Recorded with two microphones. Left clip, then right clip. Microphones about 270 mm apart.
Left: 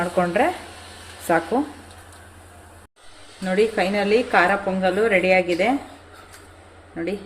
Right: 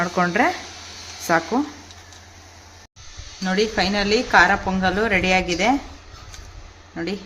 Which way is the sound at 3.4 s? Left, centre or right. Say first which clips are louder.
Left 1 dB; right.